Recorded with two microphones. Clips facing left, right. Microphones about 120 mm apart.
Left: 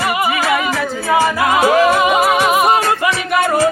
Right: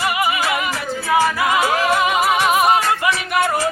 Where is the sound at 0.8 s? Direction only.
30° left (ahead or behind).